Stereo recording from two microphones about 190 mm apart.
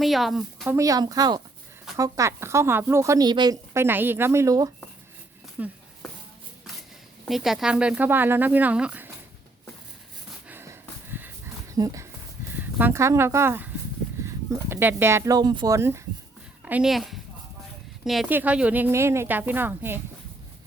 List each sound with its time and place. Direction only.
0.0 s speech: centre (ahead or behind)
0.8 s speech: 20° right (ahead or behind)
5.6 s speech: 10° right (ahead or behind)
7.3 s speech: centre (ahead or behind)
10.5 s a sound: 10° right (ahead or behind)
11.7 s speech: 15° right (ahead or behind)